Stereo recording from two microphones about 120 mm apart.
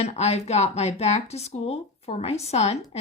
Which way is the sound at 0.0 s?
60° left (ahead or behind).